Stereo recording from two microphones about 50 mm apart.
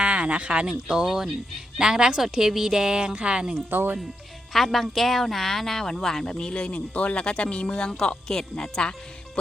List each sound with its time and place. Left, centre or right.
0.0 s a woman's voice: right
3.7 s speech: right
4.5 s speech: centre